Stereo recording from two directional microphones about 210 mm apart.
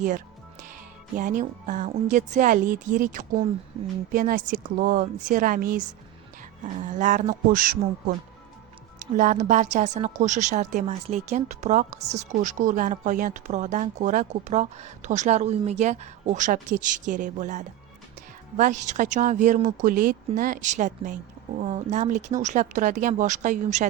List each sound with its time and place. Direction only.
1.1 s a woman's voice: 40° right (ahead or behind)
9.1 s a woman's voice: 40° right (ahead or behind)